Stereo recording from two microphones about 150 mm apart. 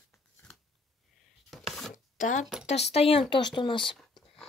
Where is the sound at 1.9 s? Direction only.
55° left (ahead or behind).